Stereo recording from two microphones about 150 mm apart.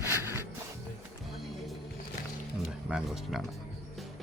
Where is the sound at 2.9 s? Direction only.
5° right (ahead or behind).